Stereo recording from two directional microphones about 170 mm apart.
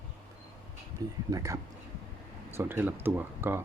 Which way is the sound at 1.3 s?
20° right (ahead or behind).